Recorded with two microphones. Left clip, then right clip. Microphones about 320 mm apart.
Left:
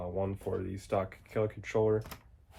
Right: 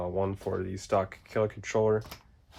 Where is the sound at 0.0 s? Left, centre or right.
Right.